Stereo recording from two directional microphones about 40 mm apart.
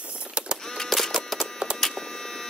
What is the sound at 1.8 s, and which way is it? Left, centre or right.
Mains hum, centre.